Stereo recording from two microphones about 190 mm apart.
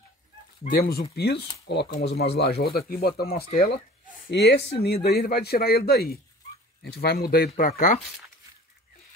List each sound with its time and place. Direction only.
0.7 s speech: 55° left (ahead or behind)
3.4 s speech: 40° left (ahead or behind)
4.3 s speech: 60° left (ahead or behind)